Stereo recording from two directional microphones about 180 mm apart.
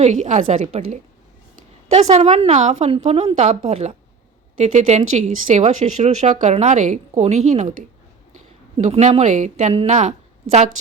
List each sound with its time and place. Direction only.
0.0 s speech: 40° right (ahead or behind)